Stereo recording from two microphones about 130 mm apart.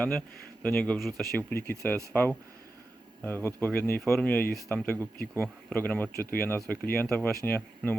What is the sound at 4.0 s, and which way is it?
Speech, 5° left (ahead or behind).